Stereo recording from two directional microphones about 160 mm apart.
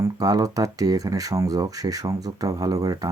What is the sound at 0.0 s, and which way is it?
Speech, 20° right (ahead or behind).